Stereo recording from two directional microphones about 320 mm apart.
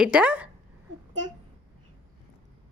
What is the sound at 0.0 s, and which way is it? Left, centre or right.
Speech, centre.